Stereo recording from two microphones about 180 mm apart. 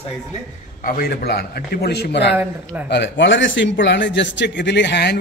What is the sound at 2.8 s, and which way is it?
A man's voice, 75° left (ahead or behind).